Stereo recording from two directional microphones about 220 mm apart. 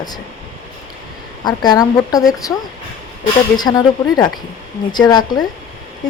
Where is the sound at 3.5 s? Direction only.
20° left (ahead or behind).